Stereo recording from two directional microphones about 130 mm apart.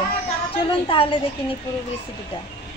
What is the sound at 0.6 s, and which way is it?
Speech, 40° left (ahead or behind).